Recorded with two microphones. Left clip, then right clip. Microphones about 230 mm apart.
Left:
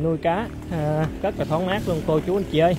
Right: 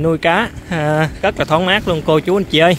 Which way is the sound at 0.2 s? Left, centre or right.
Right.